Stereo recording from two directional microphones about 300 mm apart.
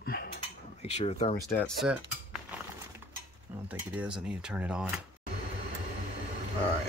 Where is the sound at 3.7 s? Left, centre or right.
Centre.